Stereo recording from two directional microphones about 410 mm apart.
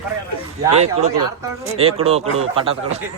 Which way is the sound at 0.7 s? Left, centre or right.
Centre.